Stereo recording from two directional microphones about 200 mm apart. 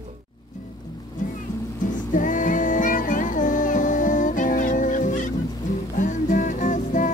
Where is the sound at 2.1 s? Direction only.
40° left (ahead or behind).